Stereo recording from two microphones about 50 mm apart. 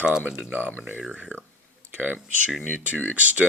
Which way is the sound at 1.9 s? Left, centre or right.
Right.